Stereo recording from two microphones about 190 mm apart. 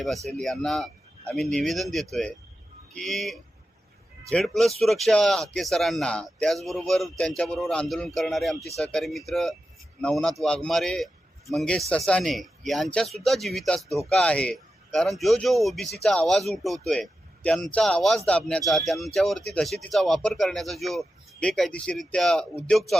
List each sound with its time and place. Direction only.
0.0 s speech: centre (ahead or behind)
13.8 s speech: 15° right (ahead or behind)
14.1 s speech: 5° left (ahead or behind)